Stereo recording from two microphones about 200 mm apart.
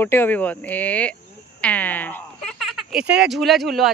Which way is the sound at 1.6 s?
5° left (ahead or behind).